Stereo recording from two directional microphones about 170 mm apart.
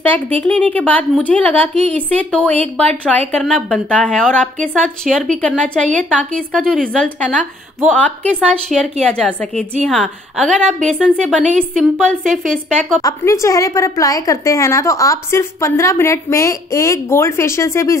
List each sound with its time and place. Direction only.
0.4 s a woman's voice: 10° left (ahead or behind)
13.0 s a woman's voice: 15° left (ahead or behind)